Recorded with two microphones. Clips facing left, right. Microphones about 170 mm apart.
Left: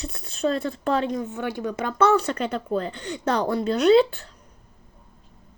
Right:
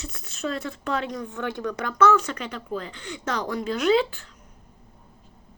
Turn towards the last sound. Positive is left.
turn(degrees=35)  # may be behind; listen again after turning